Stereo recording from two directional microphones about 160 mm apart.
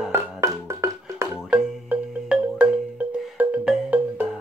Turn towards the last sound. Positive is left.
turn(degrees=-10)  # may be behind; listen again after turning